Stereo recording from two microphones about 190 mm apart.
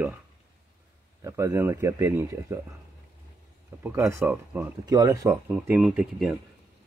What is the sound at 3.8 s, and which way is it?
Speech, 15° right (ahead or behind).